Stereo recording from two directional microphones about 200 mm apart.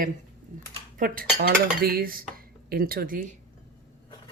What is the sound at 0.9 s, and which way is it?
Dishes, 45° right (ahead or behind).